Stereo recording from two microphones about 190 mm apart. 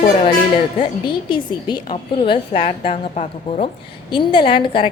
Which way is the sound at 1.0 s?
25° left (ahead or behind).